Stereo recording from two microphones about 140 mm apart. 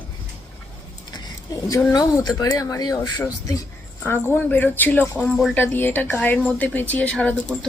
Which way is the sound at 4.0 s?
15° left (ahead or behind).